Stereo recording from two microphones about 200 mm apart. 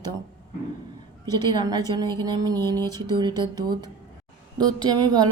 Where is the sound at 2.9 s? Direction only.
20° right (ahead or behind).